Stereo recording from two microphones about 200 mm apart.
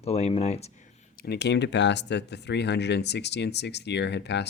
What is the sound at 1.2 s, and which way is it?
Speech, 55° left (ahead or behind).